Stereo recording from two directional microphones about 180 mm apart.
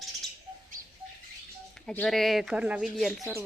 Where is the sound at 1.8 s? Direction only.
5° left (ahead or behind).